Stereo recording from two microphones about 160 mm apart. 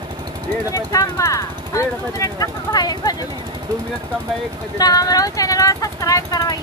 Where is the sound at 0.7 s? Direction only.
20° left (ahead or behind).